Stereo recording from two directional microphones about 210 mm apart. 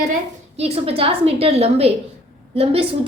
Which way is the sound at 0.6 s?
30° right (ahead or behind).